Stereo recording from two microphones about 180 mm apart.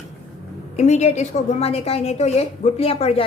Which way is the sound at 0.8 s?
40° left (ahead or behind).